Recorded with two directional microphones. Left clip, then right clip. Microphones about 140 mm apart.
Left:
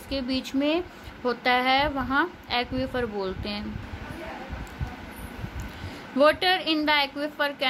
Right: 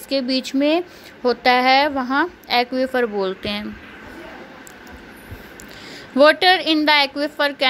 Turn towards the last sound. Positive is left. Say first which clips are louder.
# right 7 dB
turn(degrees=-45)  # may be behind; listen again after turning